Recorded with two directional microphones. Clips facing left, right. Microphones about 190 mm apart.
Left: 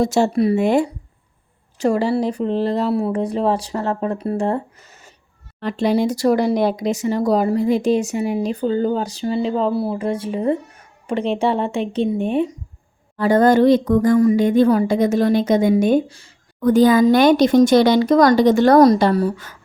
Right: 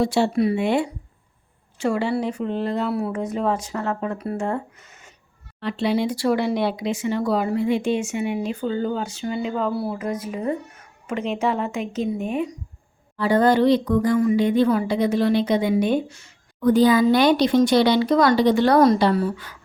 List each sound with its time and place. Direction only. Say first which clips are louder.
0.0 s speech: left 3 dB; 45° left (ahead or behind)
13.1 s speech: left 4 dB; 45° left (ahead or behind)
16.0 s speech: left 1 dB; 30° left (ahead or behind)
16.6 s speech: left 3 dB; 45° left (ahead or behind)